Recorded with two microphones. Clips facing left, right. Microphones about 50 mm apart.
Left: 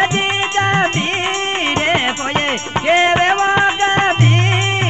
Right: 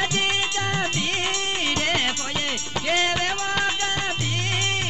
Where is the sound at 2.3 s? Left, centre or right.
Left.